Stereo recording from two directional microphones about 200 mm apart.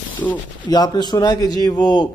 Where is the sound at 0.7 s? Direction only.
20° left (ahead or behind).